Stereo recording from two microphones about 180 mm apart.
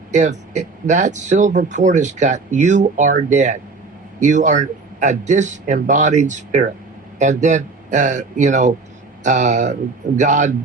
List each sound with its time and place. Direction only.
0.1 s speech: 40° right (ahead or behind)